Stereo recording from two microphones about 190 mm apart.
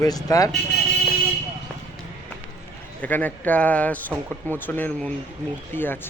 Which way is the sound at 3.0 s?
10° left (ahead or behind).